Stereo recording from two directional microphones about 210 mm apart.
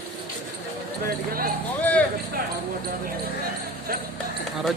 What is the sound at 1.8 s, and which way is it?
Basketball bounce, 5° left (ahead or behind).